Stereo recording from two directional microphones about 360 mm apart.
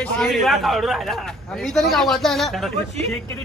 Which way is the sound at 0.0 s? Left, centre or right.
Centre.